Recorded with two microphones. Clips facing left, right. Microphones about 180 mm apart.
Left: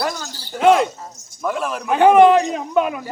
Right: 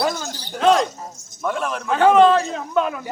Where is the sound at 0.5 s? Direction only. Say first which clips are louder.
Left 3 dB; 5° left (ahead or behind).